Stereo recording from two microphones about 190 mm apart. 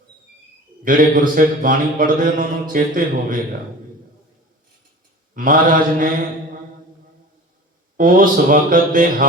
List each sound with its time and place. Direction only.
0.9 s speech: 45° right (ahead or behind)
5.3 s speech: 45° right (ahead or behind)
7.9 s speech: 45° right (ahead or behind)